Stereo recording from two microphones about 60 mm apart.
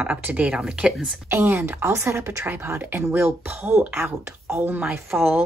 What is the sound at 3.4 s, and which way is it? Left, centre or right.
Speech, right.